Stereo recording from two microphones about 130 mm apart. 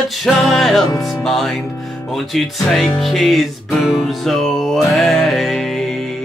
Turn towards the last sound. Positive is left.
turn(degrees=5)  # may be behind; listen again after turning